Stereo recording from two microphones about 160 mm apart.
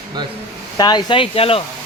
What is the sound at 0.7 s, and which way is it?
Speech, 25° left (ahead or behind).